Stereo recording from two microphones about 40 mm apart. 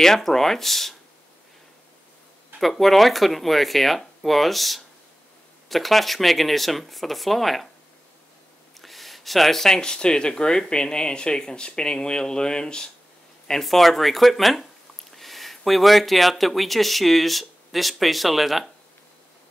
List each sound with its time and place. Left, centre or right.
0.0 s speech: centre
2.6 s speech: centre
8.7 s speech: centre; by 12.9 s left
13.5 s speech: centre